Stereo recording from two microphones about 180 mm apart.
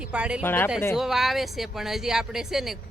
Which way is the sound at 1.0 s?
Centre (ahead or behind).